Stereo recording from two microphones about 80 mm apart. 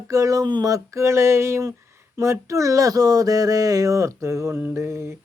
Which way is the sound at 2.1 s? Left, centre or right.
Right.